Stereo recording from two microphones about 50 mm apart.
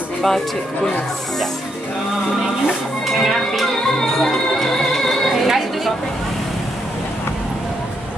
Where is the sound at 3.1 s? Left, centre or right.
Centre.